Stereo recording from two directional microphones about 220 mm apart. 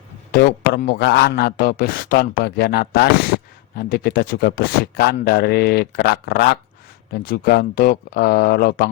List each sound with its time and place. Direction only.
0.3 s a man's voice: 45° left (ahead or behind)